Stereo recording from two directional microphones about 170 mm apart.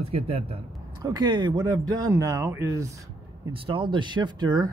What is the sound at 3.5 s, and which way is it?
Speech, 30° right (ahead or behind).